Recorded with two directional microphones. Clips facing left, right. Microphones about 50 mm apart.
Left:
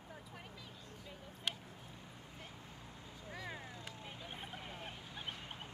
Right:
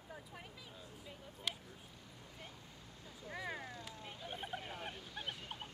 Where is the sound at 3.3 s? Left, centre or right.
Centre.